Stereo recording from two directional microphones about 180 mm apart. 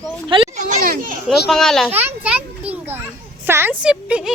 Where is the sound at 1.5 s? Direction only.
5° left (ahead or behind).